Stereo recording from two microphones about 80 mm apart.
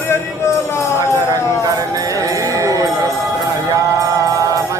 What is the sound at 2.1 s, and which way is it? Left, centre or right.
Music, right.